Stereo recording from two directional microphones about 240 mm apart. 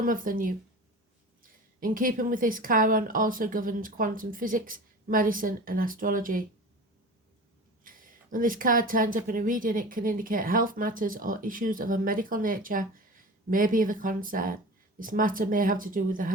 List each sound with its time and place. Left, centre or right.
0.0 s a woman's voice: right
7.9 s a woman's voice: right